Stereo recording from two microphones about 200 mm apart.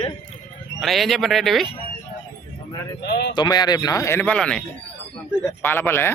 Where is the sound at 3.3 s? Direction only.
20° left (ahead or behind).